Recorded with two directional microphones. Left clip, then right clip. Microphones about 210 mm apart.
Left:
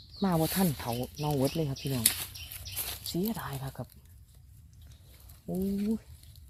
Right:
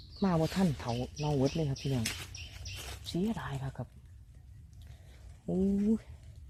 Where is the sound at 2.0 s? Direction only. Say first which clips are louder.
Left 6 dB; 50° left (ahead or behind).